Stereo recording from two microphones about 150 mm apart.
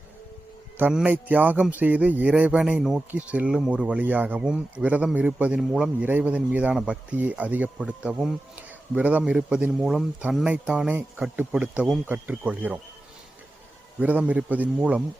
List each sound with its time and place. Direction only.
0.8 s speech: 10° right (ahead or behind)
14.0 s speech: 10° right (ahead or behind)